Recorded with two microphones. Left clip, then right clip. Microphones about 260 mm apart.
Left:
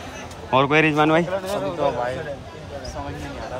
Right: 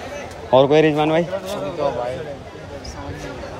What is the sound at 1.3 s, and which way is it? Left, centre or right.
Speech, left.